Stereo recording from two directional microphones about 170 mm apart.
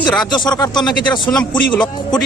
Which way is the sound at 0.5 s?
25° left (ahead or behind).